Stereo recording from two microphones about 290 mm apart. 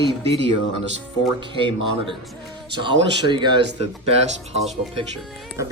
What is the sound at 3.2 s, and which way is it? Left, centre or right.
Speech, centre.